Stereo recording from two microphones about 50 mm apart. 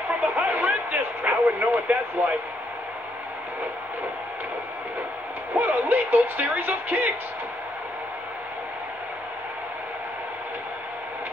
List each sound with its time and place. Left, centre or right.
0.1 s speech: right
5.5 s speech: right